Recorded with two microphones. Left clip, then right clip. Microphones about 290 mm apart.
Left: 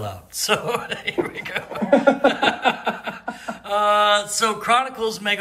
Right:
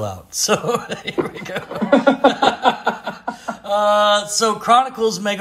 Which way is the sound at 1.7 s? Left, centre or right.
Right.